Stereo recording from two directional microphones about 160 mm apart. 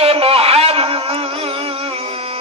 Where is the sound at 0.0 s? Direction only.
35° right (ahead or behind).